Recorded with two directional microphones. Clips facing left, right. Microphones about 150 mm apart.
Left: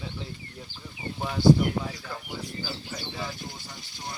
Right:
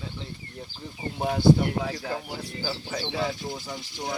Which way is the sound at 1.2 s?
55° right (ahead or behind).